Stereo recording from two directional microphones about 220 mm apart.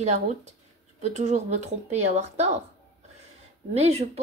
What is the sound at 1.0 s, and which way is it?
A woman's voice, 30° right (ahead or behind).